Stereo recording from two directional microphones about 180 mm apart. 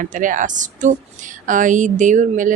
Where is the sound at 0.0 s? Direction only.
45° right (ahead or behind).